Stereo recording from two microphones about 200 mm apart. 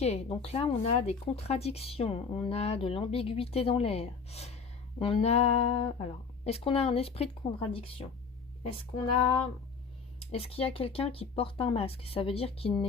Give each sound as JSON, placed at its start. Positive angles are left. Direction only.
{"t": 0.0, "sound": "speech", "side_deg": 30}
{"t": 10.2, "sound": "speech", "side_deg": 30}